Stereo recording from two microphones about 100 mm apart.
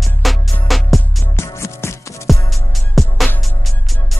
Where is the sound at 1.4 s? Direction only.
25° left (ahead or behind).